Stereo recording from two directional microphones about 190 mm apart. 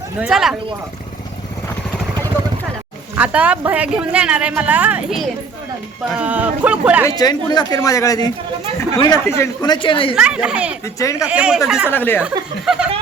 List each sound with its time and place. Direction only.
0.2 s speech: centre (ahead or behind)
3.2 s speech: 5° right (ahead or behind)
7.1 s speech: 20° left (ahead or behind)
10.2 s speech: 5° right (ahead or behind)
10.8 s speech: 15° left (ahead or behind)
11.2 s speech: 5° right (ahead or behind)
11.9 s speech: 10° left (ahead or behind)